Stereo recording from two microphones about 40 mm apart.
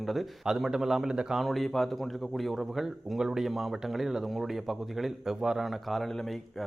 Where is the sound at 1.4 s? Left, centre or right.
Centre.